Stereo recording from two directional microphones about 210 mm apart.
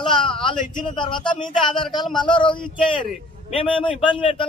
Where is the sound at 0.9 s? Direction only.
20° left (ahead or behind).